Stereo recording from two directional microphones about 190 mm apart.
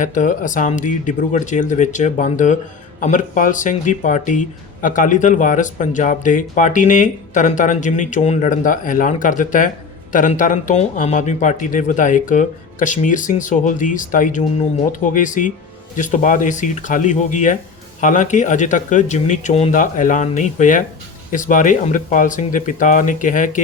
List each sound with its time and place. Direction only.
0.0 s speech: 45° left (ahead or behind)